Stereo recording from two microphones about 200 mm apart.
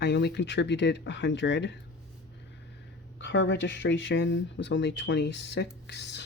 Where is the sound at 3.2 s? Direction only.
65° left (ahead or behind).